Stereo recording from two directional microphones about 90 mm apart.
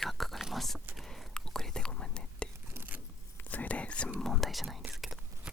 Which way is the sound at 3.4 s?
20° left (ahead or behind).